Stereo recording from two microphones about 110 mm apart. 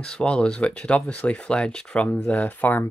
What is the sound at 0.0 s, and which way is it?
Speech, 10° left (ahead or behind).